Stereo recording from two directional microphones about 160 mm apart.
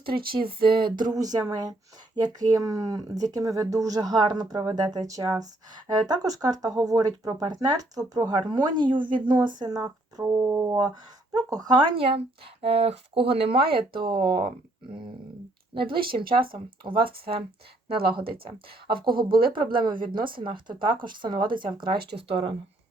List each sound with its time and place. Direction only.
0.1 s speech: 70° right (ahead or behind)
0.4 s speech: 30° right (ahead or behind)
13.7 s speech: 70° right (ahead or behind)
14.0 s speech: 30° right (ahead or behind)
15.7 s speech: 30° right (ahead or behind)
16.0 s speech: 70° right (ahead or behind)
16.6 s speech: 30° right (ahead or behind)
21.9 s speech: 90° right
22.3 s speech: 35° right (ahead or behind)